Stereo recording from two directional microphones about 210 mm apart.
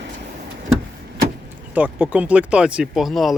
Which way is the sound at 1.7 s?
5° right (ahead or behind).